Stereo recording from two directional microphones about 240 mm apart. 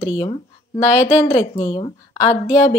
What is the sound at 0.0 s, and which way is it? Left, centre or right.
Speech, centre.